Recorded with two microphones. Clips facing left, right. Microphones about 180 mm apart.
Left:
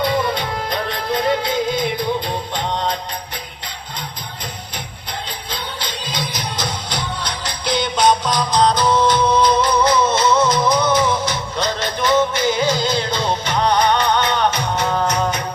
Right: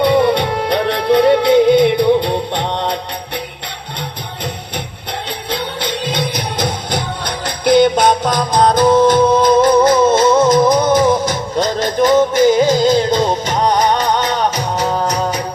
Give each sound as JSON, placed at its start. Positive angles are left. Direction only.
{"t": 0.0, "sound": "music", "side_deg": -65}
{"t": 5.5, "sound": "music", "side_deg": -60}